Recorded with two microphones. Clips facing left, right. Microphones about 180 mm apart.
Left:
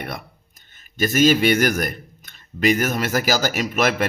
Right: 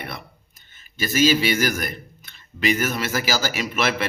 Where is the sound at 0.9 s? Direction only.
50° left (ahead or behind).